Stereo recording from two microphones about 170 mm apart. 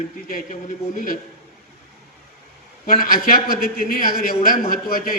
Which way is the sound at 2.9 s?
60° left (ahead or behind).